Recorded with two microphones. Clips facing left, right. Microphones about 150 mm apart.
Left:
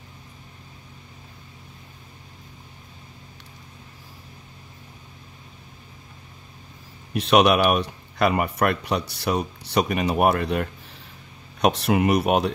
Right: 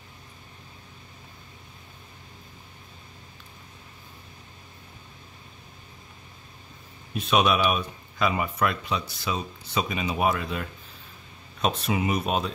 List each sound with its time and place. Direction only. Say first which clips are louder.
7.2 s speech: left 5 dB; 70° left (ahead or behind)